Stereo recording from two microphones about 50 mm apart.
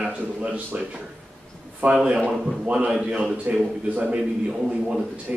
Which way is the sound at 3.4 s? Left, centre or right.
Right.